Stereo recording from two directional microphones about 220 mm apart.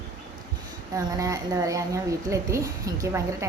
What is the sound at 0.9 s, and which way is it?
A woman's voice, 15° right (ahead or behind).